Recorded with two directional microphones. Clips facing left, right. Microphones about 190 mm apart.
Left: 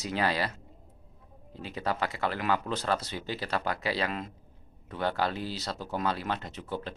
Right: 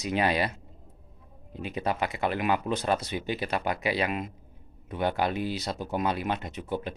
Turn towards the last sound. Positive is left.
turn(degrees=-15)  # may be behind; listen again after turning